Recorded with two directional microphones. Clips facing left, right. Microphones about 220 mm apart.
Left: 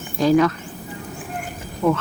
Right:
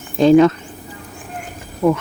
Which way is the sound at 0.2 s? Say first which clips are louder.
Right 6 dB; 25° right (ahead or behind).